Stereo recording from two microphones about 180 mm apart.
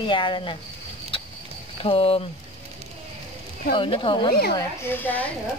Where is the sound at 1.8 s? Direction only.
30° left (ahead or behind).